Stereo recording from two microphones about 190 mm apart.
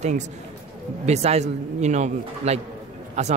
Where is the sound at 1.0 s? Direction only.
35° right (ahead or behind).